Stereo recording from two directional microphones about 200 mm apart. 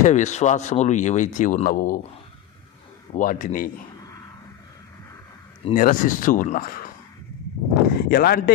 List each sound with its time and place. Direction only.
0.0 s speech: 35° left (ahead or behind)
3.2 s speech: 40° left (ahead or behind)
5.8 s speech: 40° left (ahead or behind)
7.9 s speech: 50° left (ahead or behind)